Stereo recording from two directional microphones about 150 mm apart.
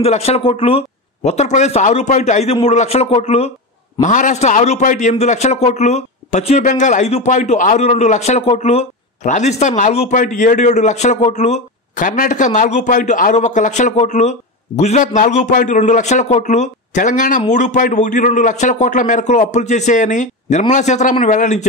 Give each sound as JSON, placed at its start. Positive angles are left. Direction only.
{"t": 0.0, "sound": "a man's voice", "side_deg": 45}
{"t": 4.0, "sound": "a man's voice", "side_deg": 55}